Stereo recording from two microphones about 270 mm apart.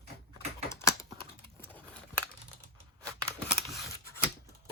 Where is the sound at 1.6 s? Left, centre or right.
Centre.